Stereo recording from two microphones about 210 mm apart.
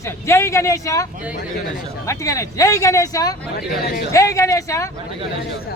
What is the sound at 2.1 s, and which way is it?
Speech, 15° left (ahead or behind).